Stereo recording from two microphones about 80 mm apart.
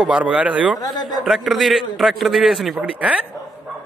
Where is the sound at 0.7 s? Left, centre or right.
Left.